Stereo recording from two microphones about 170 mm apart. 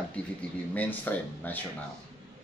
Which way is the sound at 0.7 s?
10° left (ahead or behind).